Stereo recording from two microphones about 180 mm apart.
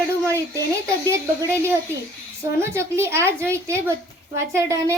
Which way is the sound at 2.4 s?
15° right (ahead or behind).